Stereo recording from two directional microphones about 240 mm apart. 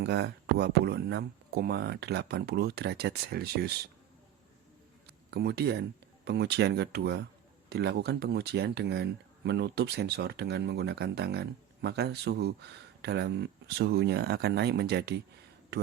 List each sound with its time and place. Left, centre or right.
0.0 s speech: right
5.0 s a sound: right
6.2 s speech: right